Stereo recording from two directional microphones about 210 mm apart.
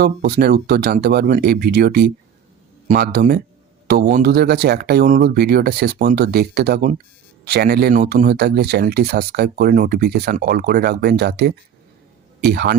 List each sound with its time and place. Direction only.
0.0 s speech: 45° right (ahead or behind)